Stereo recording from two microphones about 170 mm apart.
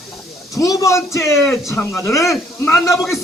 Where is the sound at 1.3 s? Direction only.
Centre (ahead or behind).